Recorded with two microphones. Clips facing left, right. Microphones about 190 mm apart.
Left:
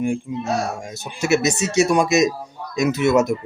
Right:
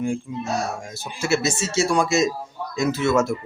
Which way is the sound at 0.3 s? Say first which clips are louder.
Left 3 dB; 15° left (ahead or behind).